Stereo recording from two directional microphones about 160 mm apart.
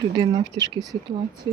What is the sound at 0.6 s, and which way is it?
Speech, 30° right (ahead or behind).